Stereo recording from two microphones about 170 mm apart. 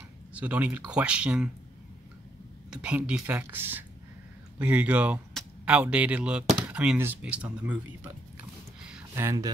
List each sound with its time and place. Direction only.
0.3 s speech: 10° right (ahead or behind)
2.7 s speech: 5° right (ahead or behind)
9.1 s speech: 15° right (ahead or behind)